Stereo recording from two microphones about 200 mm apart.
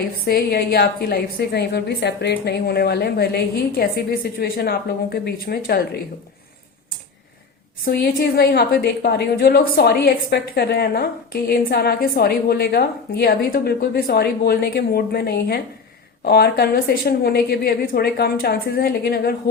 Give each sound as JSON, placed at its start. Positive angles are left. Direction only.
{"t": 0.3, "sound": "a woman's voice", "side_deg": 50}
{"t": 7.9, "sound": "a woman's voice", "side_deg": 55}